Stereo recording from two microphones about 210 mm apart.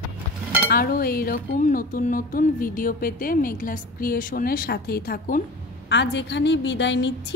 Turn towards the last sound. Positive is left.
turn(degrees=60)  # may be behind; listen again after turning